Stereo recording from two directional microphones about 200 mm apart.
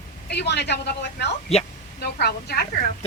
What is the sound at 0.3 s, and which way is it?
A woman's voice, 55° left (ahead or behind).